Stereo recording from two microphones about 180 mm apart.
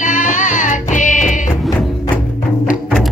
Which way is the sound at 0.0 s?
45° left (ahead or behind).